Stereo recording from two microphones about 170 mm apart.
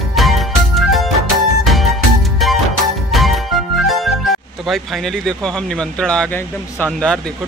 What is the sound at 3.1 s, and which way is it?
Speech, centre (ahead or behind).